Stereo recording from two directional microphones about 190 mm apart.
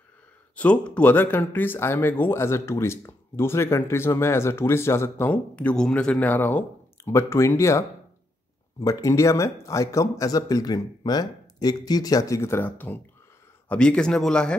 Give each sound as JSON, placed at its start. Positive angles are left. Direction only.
{"t": 0.6, "sound": "speech", "side_deg": 5}